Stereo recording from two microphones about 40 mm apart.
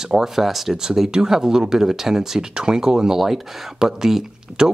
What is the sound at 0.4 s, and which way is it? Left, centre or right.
Speech, centre.